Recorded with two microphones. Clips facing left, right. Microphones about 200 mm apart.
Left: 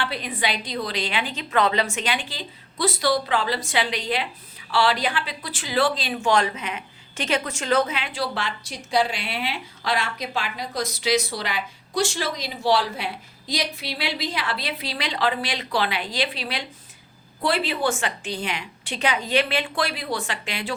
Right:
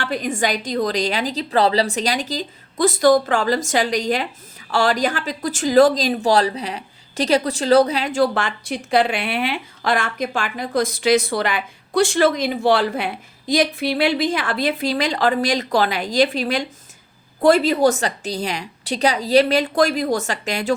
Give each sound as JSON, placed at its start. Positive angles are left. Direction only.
{"t": 0.0, "sound": "a woman's voice", "side_deg": -45}